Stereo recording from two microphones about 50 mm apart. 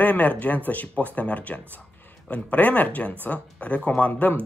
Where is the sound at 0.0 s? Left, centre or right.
Left.